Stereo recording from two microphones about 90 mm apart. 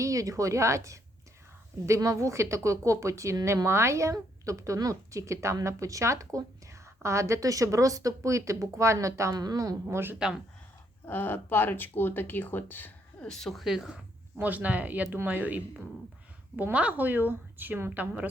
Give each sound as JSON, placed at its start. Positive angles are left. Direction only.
{"t": 0.0, "sound": "a woman's voice", "side_deg": -40}
{"t": 9.3, "sound": "a woman's voice", "side_deg": -45}
{"t": 9.9, "sound": "a woman's voice", "side_deg": -25}
{"t": 11.0, "sound": "speech", "side_deg": 25}
{"t": 13.2, "sound": "speech", "side_deg": 5}
{"t": 14.3, "sound": "a woman's voice", "side_deg": -20}